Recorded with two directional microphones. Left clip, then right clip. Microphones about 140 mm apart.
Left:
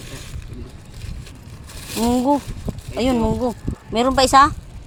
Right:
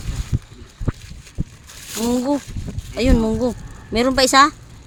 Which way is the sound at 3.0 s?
20° right (ahead or behind).